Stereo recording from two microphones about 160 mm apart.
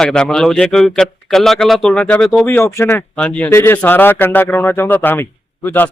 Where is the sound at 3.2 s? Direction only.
5° left (ahead or behind).